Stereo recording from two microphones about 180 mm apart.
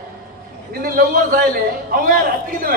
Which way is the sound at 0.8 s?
55° right (ahead or behind).